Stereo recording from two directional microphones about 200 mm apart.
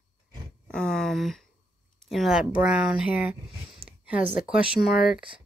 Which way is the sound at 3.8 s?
30° right (ahead or behind).